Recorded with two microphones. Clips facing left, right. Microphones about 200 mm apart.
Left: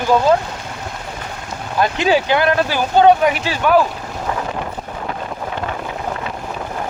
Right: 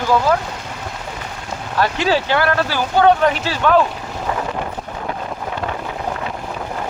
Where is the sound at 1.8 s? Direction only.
15° left (ahead or behind).